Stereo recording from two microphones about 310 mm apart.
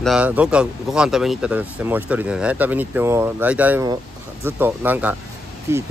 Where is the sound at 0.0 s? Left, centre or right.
Centre.